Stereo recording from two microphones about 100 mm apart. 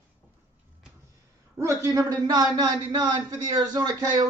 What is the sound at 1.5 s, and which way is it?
A man's voice, 30° right (ahead or behind).